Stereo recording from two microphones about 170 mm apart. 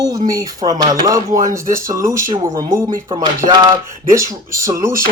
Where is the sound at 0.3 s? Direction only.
20° right (ahead or behind).